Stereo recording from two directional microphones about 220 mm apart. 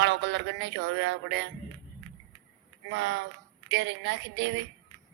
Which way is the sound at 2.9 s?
55° right (ahead or behind).